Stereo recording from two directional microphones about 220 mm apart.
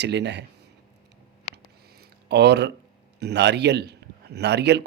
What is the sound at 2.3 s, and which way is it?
A man's voice, 50° right (ahead or behind).